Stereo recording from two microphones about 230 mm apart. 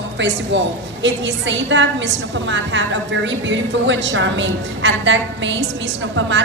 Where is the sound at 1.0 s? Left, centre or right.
Right.